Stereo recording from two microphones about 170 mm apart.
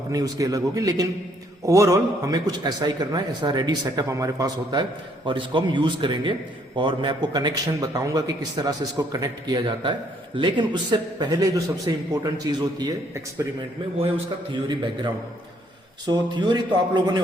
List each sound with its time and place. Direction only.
0.1 s a man's voice: 20° right (ahead or behind)
16.0 s a man's voice: 25° right (ahead or behind)